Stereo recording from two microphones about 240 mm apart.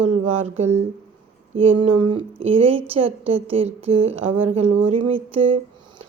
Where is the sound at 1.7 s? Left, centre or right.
Right.